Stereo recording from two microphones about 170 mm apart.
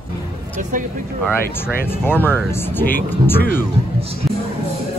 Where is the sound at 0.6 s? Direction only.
45° right (ahead or behind).